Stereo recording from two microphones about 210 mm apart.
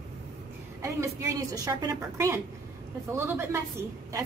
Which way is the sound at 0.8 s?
15° right (ahead or behind).